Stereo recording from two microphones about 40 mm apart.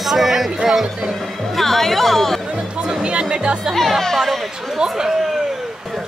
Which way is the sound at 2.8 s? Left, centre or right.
Right.